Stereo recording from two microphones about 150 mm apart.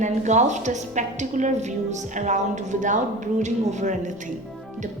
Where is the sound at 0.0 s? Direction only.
50° right (ahead or behind).